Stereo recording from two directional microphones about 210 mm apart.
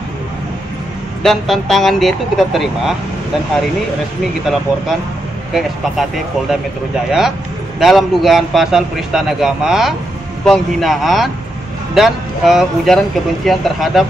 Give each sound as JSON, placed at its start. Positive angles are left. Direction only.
{"t": 1.2, "sound": "a man's voice", "side_deg": 0}
{"t": 5.5, "sound": "a man's voice", "side_deg": 0}
{"t": 7.1, "sound": "a man's voice", "side_deg": 0}